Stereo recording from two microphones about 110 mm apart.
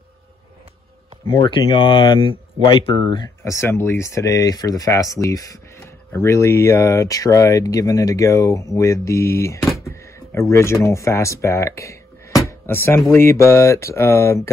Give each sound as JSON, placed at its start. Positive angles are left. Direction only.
{"t": 1.4, "sound": "speech", "side_deg": 45}
{"t": 3.4, "sound": "speech", "side_deg": 25}
{"t": 9.8, "sound": "a sound", "side_deg": 25}
{"t": 10.5, "sound": "speech", "side_deg": 25}